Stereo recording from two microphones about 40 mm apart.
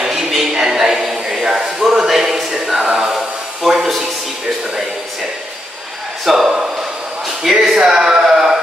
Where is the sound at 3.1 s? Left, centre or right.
Centre.